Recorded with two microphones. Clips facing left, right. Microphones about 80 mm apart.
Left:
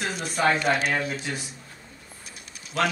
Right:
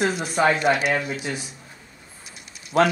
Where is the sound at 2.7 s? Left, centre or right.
Right.